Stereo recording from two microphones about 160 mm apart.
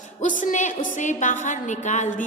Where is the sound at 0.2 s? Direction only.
55° left (ahead or behind).